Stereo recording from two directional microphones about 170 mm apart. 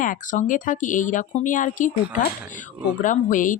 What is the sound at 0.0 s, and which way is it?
Speech, 50° left (ahead or behind).